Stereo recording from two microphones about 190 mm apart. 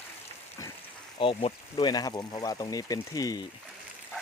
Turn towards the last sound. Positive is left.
turn(degrees=20)  # may be behind; listen again after turning